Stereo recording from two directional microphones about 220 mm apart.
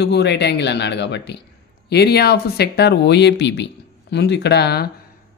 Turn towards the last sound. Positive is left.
turn(degrees=50)  # may be behind; listen again after turning